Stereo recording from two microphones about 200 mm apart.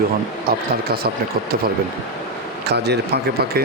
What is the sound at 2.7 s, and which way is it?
Speech, 55° right (ahead or behind).